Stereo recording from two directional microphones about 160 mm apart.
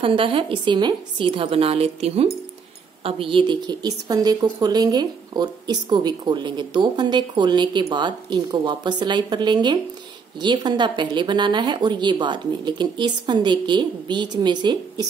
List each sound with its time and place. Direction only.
0.0 s a woman's voice: 35° right (ahead or behind)